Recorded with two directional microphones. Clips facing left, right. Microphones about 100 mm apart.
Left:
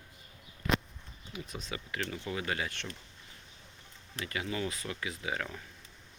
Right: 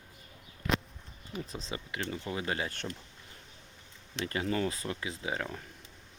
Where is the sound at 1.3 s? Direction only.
35° right (ahead or behind).